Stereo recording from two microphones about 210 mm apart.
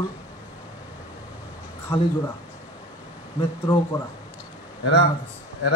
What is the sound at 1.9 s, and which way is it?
Speech, 25° left (ahead or behind).